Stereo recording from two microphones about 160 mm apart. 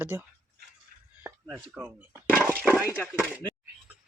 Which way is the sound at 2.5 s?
10° right (ahead or behind).